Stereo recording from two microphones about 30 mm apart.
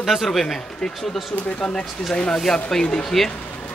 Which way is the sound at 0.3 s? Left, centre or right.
Centre.